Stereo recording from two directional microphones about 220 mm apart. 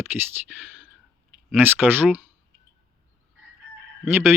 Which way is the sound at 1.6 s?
10° right (ahead or behind).